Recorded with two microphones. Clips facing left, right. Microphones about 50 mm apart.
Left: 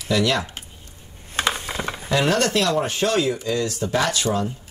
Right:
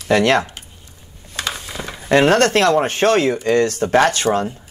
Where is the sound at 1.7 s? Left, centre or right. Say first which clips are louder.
Left 2 dB; left.